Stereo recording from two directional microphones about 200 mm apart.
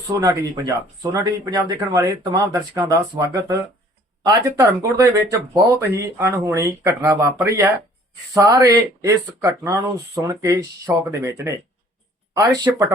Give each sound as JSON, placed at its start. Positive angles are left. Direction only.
{"t": 0.1, "sound": "speech", "side_deg": -15}
{"t": 4.8, "sound": "speech", "side_deg": -15}